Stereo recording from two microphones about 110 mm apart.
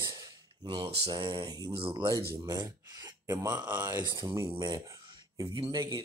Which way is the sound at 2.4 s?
35° right (ahead or behind).